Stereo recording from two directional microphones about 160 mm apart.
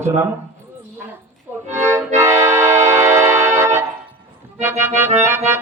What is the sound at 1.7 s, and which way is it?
Music, 15° right (ahead or behind).